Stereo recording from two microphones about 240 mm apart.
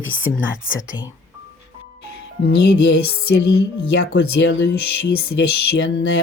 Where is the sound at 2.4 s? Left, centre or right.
Left.